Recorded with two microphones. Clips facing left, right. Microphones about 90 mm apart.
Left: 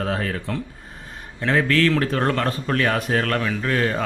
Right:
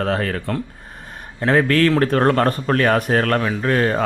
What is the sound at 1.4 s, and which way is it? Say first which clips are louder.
A man's voice: right 3 dB; 40° right (ahead or behind).